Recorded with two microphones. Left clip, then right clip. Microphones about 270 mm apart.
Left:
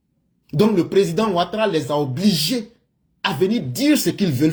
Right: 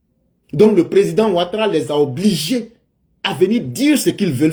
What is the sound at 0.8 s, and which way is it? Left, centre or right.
Speech, left.